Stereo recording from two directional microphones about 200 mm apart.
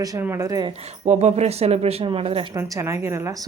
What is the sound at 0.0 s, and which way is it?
Speech, 15° right (ahead or behind).